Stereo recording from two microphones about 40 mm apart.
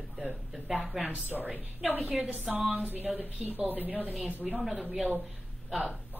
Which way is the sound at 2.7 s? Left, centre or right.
Right.